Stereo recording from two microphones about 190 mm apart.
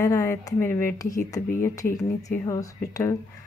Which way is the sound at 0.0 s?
15° left (ahead or behind).